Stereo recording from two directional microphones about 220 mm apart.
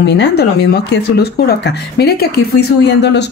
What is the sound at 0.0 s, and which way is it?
Speech, 50° left (ahead or behind).